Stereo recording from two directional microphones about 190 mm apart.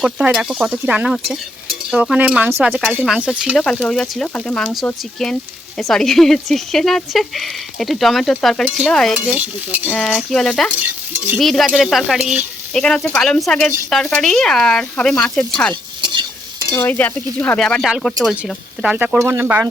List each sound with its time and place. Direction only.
0.0 s speech: centre (ahead or behind)
15.7 s stir: 25° right (ahead or behind)
16.6 s speech: 10° left (ahead or behind); by 19.6 s 10° right (ahead or behind)